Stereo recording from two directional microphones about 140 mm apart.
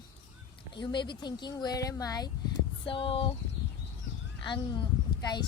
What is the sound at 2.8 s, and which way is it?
Speech, 40° left (ahead or behind).